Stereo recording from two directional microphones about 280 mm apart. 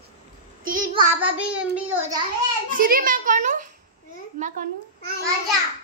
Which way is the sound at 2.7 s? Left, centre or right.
Right.